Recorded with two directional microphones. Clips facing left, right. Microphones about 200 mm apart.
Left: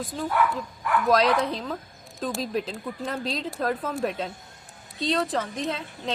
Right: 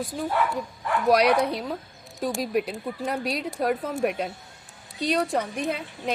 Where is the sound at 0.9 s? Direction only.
25° right (ahead or behind).